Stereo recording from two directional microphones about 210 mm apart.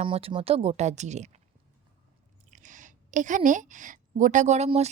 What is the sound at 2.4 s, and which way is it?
A woman's voice, 35° right (ahead or behind).